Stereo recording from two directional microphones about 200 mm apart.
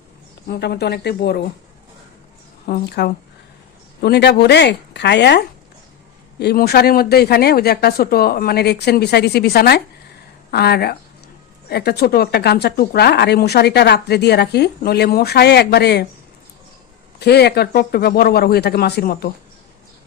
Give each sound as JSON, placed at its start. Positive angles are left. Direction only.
{"t": 0.4, "sound": "speech", "side_deg": 55}
{"t": 2.6, "sound": "speech", "side_deg": 50}
{"t": 6.4, "sound": "speech", "side_deg": 50}
{"t": 17.2, "sound": "speech", "side_deg": 55}